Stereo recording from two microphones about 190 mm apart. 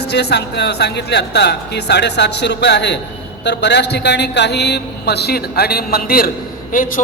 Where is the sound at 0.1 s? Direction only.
60° left (ahead or behind).